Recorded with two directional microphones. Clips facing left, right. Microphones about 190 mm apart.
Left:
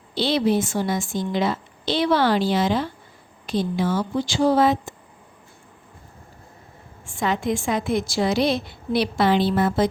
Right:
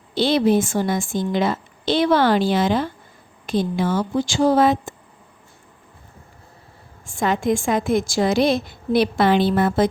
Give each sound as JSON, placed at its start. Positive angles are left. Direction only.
{"t": 0.1, "sound": "a woman's voice", "side_deg": -50}
{"t": 7.0, "sound": "a woman's voice", "side_deg": -45}